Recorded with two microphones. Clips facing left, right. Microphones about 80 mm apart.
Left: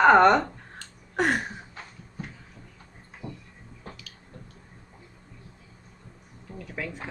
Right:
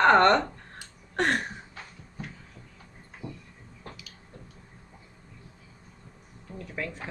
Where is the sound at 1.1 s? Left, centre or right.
Centre.